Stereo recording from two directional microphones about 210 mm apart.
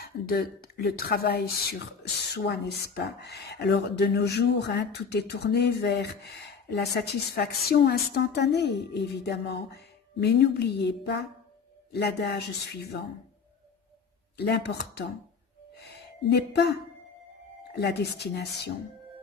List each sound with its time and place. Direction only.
0.0 s speech: 45° left (ahead or behind)
14.3 s speech: 50° left (ahead or behind)
15.7 s music: 50° left (ahead or behind)
17.7 s speech: 50° left (ahead or behind)